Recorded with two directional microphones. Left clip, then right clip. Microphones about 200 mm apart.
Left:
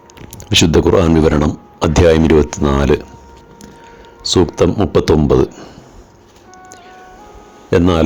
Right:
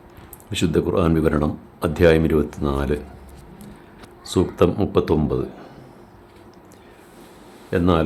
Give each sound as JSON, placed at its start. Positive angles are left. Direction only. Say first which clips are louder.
{"t": 0.5, "sound": "speech", "louder": "left 10 dB", "side_deg": 35}
{"t": 4.2, "sound": "speech", "louder": "left 6 dB", "side_deg": 30}
{"t": 7.7, "sound": "speech", "louder": "left 7 dB", "side_deg": 40}